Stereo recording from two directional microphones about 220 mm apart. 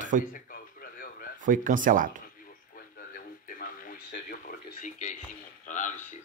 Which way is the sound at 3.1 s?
40° left (ahead or behind).